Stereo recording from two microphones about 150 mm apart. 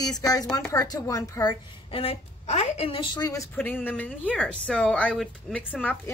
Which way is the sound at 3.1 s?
25° left (ahead or behind).